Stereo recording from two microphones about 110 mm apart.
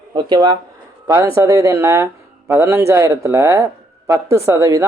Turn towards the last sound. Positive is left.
turn(degrees=-30)  # may be behind; listen again after turning